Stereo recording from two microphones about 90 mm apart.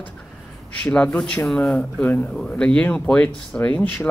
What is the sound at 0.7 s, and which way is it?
Speech, 20° left (ahead or behind).